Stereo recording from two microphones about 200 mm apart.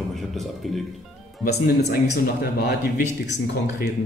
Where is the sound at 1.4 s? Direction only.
55° left (ahead or behind).